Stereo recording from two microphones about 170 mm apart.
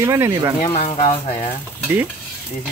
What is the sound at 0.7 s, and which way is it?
Speech, 40° left (ahead or behind).